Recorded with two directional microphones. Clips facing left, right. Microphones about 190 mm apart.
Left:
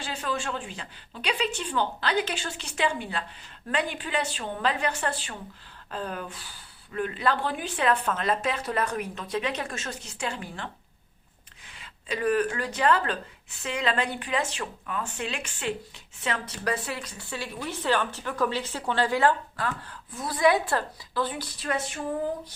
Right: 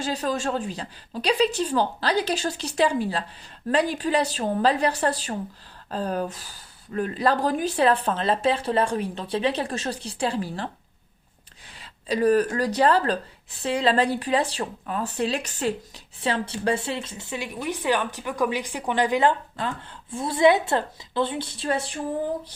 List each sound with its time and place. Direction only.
0.0 s speech: 40° right (ahead or behind)
11.8 s a woman's voice: 35° right (ahead or behind)